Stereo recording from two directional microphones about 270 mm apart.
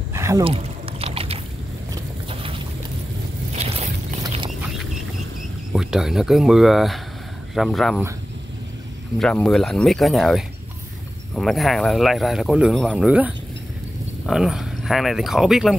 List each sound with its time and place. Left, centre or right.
0.1 s a sound: centre
3.5 s squish: right
5.7 s speech: centre
9.2 s speech: centre